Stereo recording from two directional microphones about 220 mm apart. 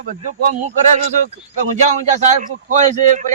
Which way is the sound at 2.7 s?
35° right (ahead or behind).